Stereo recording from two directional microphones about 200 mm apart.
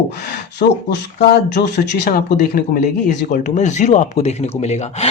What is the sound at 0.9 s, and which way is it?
Speech, 55° left (ahead or behind).